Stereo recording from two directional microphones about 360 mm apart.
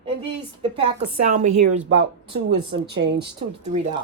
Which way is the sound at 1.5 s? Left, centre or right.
Right.